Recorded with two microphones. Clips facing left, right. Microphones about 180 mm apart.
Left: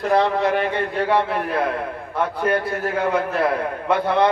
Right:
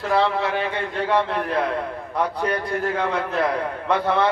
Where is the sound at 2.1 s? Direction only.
5° left (ahead or behind).